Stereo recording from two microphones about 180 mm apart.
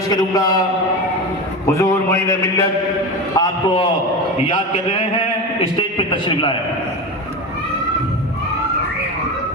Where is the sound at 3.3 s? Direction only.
20° left (ahead or behind).